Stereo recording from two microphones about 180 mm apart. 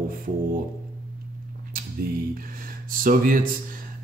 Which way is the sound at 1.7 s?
55° right (ahead or behind).